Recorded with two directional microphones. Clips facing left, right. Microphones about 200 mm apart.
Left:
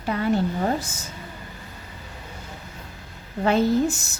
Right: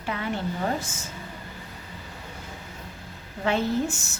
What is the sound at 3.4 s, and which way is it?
Speech, 40° left (ahead or behind).